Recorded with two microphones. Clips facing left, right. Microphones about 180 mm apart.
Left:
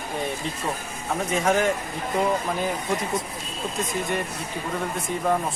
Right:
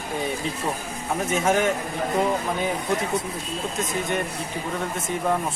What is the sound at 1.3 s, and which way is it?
Speech, 5° right (ahead or behind).